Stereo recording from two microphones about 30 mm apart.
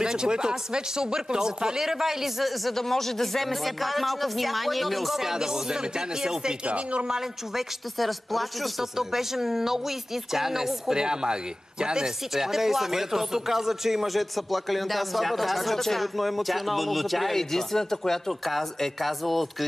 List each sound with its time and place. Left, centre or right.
0.0 s speech: right
1.8 s speech: centre
2.7 s speech: centre
5.1 s speech: centre
6.6 s speech: right
7.5 s speech: centre
8.9 s speech: centre
11.0 s speech: right
12.4 s speech: centre
17.4 s speech: centre
18.4 s speech: centre